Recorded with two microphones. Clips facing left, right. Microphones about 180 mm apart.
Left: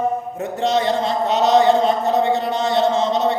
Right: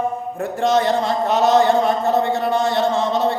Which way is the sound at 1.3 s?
20° left (ahead or behind).